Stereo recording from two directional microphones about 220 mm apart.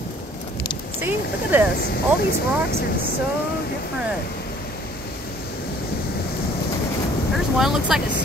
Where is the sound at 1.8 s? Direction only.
45° left (ahead or behind).